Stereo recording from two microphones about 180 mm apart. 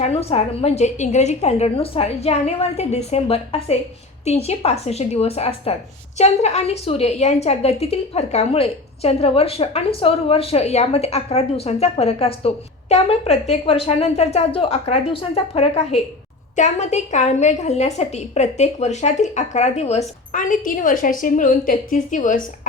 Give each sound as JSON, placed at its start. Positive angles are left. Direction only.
{"t": 0.0, "sound": "a woman's voice", "side_deg": 35}